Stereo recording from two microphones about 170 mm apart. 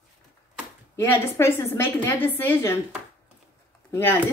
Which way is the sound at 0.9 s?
15° left (ahead or behind).